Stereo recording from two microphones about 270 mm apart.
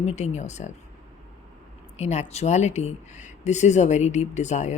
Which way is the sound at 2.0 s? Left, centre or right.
Left.